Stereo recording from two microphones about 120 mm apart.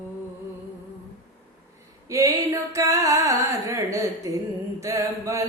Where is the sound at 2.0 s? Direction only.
25° right (ahead or behind).